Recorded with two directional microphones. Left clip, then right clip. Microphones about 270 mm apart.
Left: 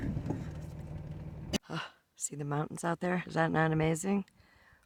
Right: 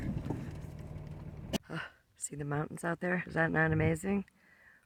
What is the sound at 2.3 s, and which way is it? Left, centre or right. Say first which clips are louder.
Speech: left 1 dB; centre.